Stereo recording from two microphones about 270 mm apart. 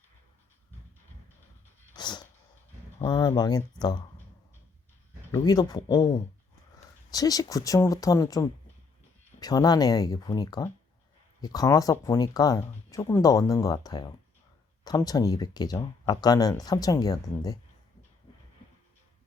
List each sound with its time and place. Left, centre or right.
2.0 s sneeze: centre
3.0 s speech: centre
5.3 s speech: centre